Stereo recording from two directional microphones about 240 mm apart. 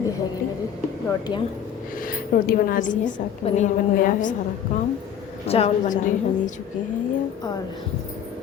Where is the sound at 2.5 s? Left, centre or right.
Left.